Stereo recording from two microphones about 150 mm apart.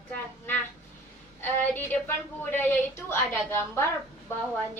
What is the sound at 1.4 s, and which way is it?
A woman's voice, 15° left (ahead or behind).